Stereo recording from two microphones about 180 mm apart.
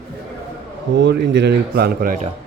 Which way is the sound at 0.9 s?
75° right (ahead or behind).